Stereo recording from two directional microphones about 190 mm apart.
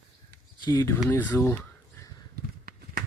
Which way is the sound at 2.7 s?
50° right (ahead or behind).